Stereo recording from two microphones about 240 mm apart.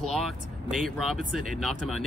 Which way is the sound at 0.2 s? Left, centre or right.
Centre.